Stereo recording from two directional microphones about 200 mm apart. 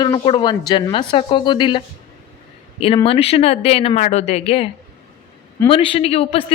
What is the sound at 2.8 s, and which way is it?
A woman's voice, 30° left (ahead or behind).